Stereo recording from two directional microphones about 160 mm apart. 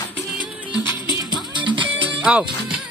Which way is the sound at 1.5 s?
30° right (ahead or behind).